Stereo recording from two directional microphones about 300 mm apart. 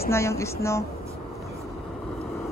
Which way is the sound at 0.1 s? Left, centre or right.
Centre.